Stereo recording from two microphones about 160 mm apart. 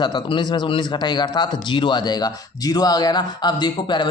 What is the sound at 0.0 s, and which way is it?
Speech, 30° left (ahead or behind).